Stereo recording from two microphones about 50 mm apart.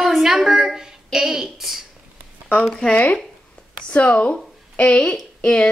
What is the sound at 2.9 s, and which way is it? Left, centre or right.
A woman's voice, left.